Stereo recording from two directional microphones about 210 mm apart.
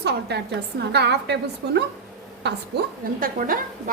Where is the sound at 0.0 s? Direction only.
50° right (ahead or behind).